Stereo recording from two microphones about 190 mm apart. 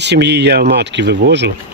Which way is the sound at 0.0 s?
65° right (ahead or behind).